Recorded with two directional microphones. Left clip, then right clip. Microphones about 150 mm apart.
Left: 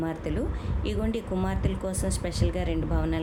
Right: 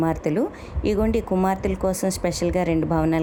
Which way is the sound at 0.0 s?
45° right (ahead or behind).